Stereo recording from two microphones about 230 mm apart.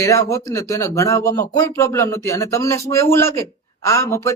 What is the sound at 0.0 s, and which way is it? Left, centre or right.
Speech, centre.